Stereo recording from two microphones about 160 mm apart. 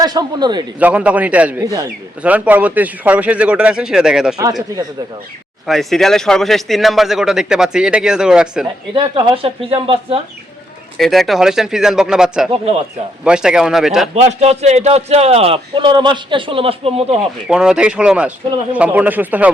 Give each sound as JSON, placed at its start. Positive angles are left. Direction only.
{"t": 0.0, "sound": "a man's voice", "side_deg": -25}
{"t": 0.8, "sound": "a man's voice", "side_deg": -10}
{"t": 5.6, "sound": "speech", "side_deg": 0}
{"t": 9.0, "sound": "a man's voice", "side_deg": -30}
{"t": 10.9, "sound": "speech", "side_deg": 0}
{"t": 12.5, "sound": "a man's voice", "side_deg": -40}
{"t": 13.2, "sound": "speech", "side_deg": -5}
{"t": 14.2, "sound": "a man's voice", "side_deg": -45}
{"t": 17.5, "sound": "a man's voice", "side_deg": -5}